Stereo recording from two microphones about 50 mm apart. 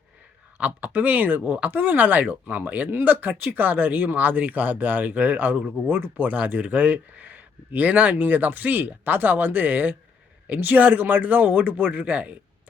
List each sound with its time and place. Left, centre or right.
0.6 s speech: right